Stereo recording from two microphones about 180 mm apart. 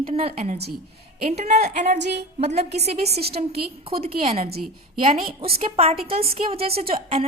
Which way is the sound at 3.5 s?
30° right (ahead or behind).